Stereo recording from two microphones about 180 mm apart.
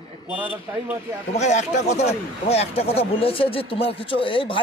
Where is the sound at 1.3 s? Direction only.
40° left (ahead or behind).